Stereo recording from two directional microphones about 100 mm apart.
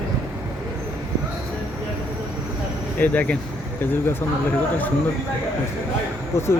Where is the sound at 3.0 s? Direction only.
15° left (ahead or behind).